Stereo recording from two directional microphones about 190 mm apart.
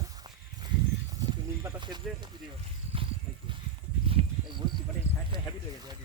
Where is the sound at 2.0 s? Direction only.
Centre (ahead or behind).